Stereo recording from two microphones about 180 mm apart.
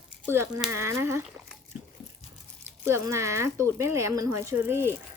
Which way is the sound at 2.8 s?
15° right (ahead or behind).